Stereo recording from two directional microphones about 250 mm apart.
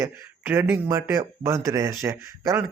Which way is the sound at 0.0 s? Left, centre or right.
Centre.